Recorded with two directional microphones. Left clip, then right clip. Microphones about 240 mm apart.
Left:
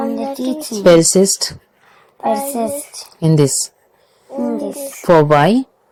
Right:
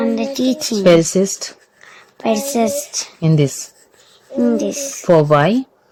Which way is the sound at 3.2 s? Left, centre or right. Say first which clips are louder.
Left 4 dB; centre.